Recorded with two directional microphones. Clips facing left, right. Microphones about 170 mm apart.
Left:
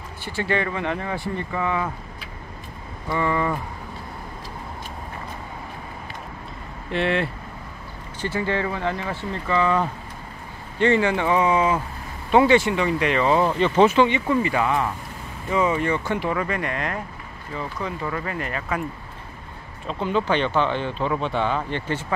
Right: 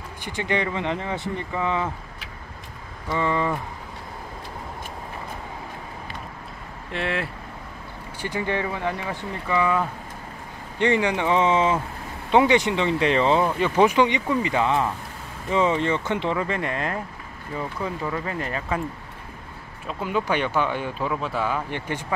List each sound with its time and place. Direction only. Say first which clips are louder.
0.2 s speech: left 1 dB; 20° right (ahead or behind)
3.1 s speech: left 1 dB; 20° right (ahead or behind)
6.9 s speech: left 5 dB; centre (ahead or behind)
8.2 s speech: left 2 dB; 15° right (ahead or behind)
13.6 s speech: left 2 dB; 10° right (ahead or behind); by 17.0 s 30° right (ahead or behind)
18.2 s speech: even; 25° right (ahead or behind)
19.9 s speech: left 2 dB; 10° right (ahead or behind)